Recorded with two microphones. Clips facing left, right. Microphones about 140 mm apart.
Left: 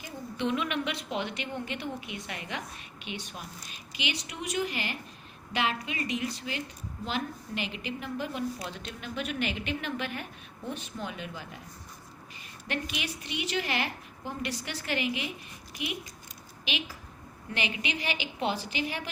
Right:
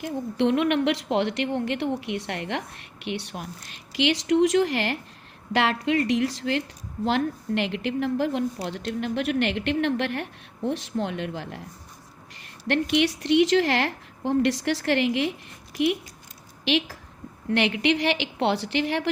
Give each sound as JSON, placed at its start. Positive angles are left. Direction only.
{"t": 0.0, "sound": "a woman's voice", "side_deg": -80}
{"t": 3.9, "sound": "a woman's voice", "side_deg": -90}
{"t": 12.6, "sound": "a woman's voice", "side_deg": -80}
{"t": 16.6, "sound": "a woman's voice", "side_deg": -90}